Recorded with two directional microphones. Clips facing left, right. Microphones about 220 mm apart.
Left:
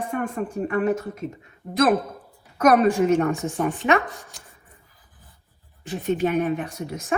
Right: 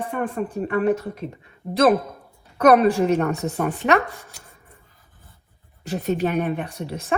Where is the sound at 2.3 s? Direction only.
30° right (ahead or behind).